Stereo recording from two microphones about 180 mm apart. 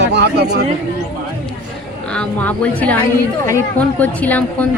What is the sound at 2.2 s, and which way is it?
A woman's voice, 5° left (ahead or behind).